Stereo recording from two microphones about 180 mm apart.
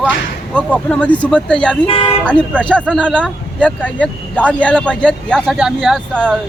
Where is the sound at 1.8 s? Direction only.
30° left (ahead or behind).